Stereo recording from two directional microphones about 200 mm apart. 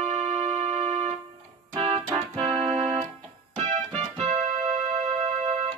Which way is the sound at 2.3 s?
30° right (ahead or behind).